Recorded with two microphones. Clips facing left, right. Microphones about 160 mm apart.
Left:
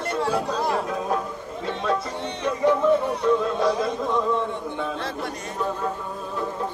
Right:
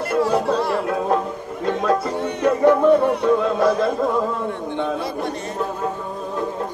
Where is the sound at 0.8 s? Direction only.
55° right (ahead or behind).